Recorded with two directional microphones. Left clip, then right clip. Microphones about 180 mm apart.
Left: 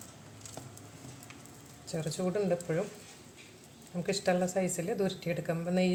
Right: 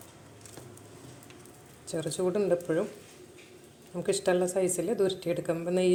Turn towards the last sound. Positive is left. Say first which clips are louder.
# right 4 dB
turn(degrees=-35)  # may be behind; listen again after turning